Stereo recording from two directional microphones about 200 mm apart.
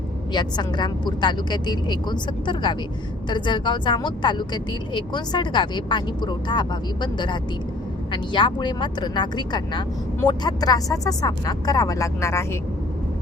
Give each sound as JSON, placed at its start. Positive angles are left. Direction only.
{"t": 0.3, "sound": "speech", "side_deg": 20}